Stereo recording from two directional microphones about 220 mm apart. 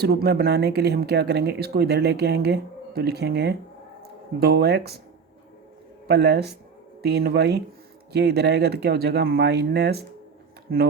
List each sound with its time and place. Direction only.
0.0 s speech: 45° right (ahead or behind)
6.1 s speech: 50° right (ahead or behind)